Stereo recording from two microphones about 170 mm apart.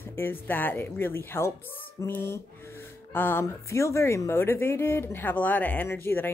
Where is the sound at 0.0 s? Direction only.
15° left (ahead or behind).